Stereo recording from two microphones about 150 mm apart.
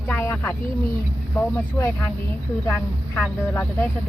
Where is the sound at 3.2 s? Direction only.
10° left (ahead or behind).